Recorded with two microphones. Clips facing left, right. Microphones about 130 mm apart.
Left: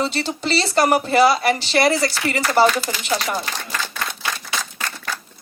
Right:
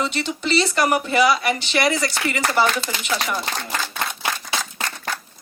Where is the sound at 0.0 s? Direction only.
35° left (ahead or behind).